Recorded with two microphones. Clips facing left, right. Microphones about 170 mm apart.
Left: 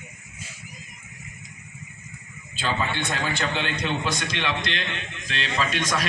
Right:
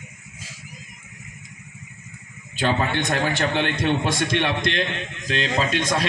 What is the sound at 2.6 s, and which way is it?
A man's voice, 65° right (ahead or behind).